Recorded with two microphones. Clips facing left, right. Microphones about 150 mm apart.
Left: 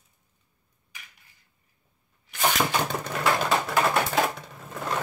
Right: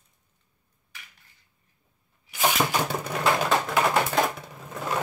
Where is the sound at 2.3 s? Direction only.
5° right (ahead or behind).